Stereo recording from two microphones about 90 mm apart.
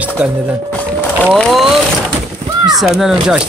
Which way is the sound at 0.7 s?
15° left (ahead or behind).